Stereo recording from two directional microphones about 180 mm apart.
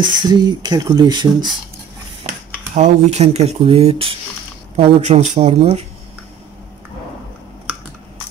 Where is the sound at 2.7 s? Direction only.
40° right (ahead or behind).